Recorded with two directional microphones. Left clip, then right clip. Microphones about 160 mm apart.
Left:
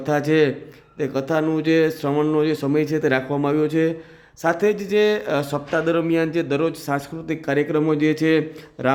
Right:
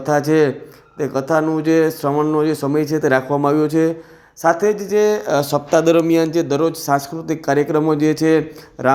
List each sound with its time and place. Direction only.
0.0 s speech: 5° left (ahead or behind)
2.1 s speech: 15° left (ahead or behind)
2.4 s speech: 5° left (ahead or behind)